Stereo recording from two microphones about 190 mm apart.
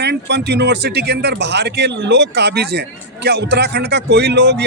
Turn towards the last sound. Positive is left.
turn(degrees=-65)  # may be behind; listen again after turning